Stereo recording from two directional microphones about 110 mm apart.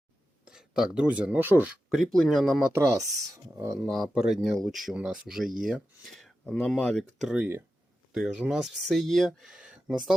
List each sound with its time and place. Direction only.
0.4 s speech: 5° right (ahead or behind)
1.9 s speech: centre (ahead or behind)
2.7 s speech: 25° right (ahead or behind)
3.8 s speech: centre (ahead or behind)